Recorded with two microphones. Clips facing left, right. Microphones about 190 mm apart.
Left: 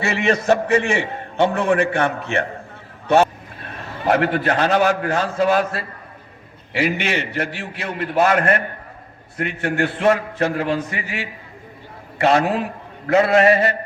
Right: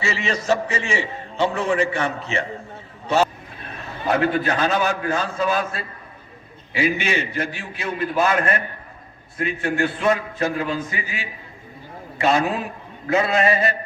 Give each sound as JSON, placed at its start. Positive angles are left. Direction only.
{"t": 0.0, "sound": "a man's voice", "side_deg": 60}
{"t": 4.1, "sound": "a man's voice", "side_deg": 70}
{"t": 12.2, "sound": "a man's voice", "side_deg": 65}